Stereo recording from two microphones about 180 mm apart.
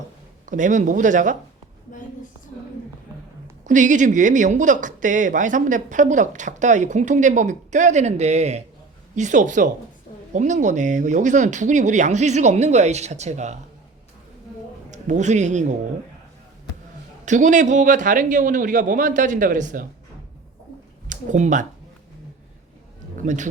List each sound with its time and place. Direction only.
0.4 s speech: 45° right (ahead or behind)
3.7 s speech: 45° right (ahead or behind)
14.8 s a man's voice: 40° right (ahead or behind)
17.2 s speech: 45° right (ahead or behind)
21.1 s speech: 45° right (ahead or behind)
23.1 s speech: 45° right (ahead or behind)